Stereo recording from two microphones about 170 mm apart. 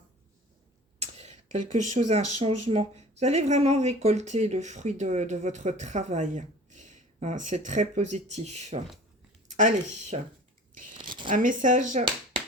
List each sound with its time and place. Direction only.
0.9 s speech: 40° right (ahead or behind)
10.1 s speech: 40° right (ahead or behind)
10.9 s shuffling cards: 30° right (ahead or behind)
11.3 s speech: 50° right (ahead or behind)